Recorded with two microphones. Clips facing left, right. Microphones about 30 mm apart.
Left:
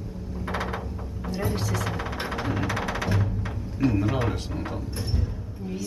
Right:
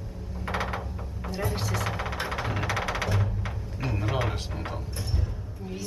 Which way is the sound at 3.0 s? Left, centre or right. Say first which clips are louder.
Left 2 dB; centre.